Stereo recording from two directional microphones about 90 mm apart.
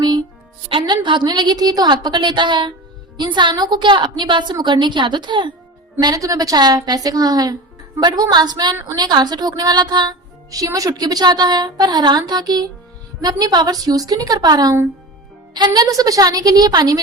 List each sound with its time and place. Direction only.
0.7 s a woman's voice: 65° right (ahead or behind)
6.0 s a woman's voice: 45° right (ahead or behind)
10.5 s a woman's voice: 40° right (ahead or behind)